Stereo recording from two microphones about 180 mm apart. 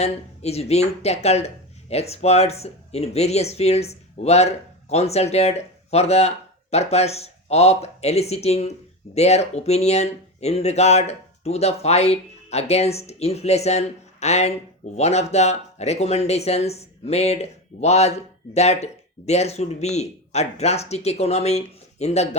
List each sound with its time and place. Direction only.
0.0 s speech: 35° left (ahead or behind)